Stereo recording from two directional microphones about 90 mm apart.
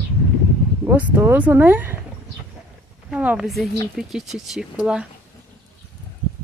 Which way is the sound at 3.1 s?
10° right (ahead or behind).